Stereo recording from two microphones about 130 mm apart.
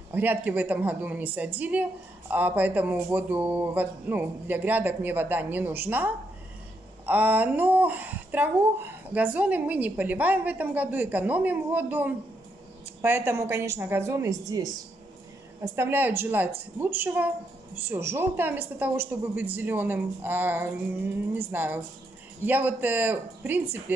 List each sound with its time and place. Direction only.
0.1 s speech: 15° right (ahead or behind)
7.1 s a woman's voice: 15° right (ahead or behind)